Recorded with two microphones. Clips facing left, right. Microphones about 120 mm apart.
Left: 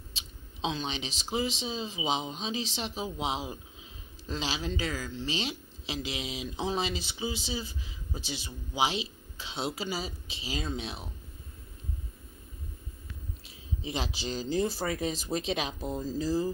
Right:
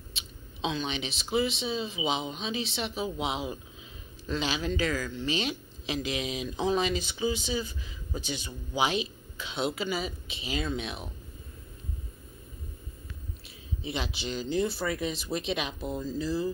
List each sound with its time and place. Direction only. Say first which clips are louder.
0.1 s speech: right 2 dB; 30° left (ahead or behind)
13.8 s speech: even; 35° left (ahead or behind)